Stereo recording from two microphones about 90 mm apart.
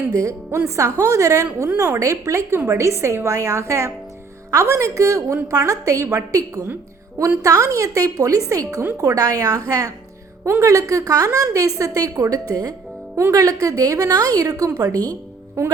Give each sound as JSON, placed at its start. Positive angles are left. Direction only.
{"t": 0.1, "sound": "a woman's voice", "side_deg": -35}